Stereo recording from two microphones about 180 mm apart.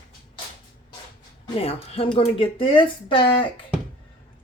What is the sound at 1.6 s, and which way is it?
Speech, 35° left (ahead or behind).